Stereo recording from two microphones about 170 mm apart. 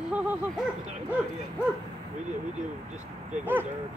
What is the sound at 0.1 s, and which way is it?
Bow-wow, 10° right (ahead or behind).